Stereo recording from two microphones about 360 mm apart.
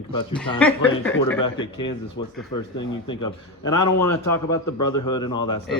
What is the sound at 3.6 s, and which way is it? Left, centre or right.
Speech, left.